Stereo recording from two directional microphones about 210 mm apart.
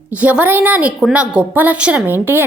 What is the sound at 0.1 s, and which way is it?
A woman's voice, 5° right (ahead or behind).